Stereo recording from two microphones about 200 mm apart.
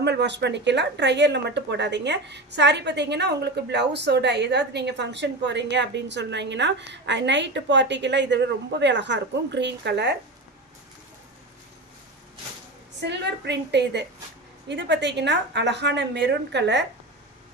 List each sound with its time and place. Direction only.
0.0 s speech: 60° right (ahead or behind)
13.0 s speech: 60° right (ahead or behind)